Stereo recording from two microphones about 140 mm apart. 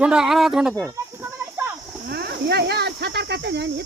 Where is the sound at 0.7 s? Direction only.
15° right (ahead or behind).